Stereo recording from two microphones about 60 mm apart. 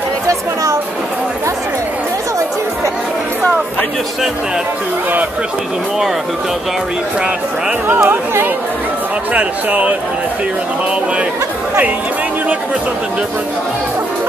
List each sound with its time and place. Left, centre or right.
8.0 s speech: right
9.3 s speech: right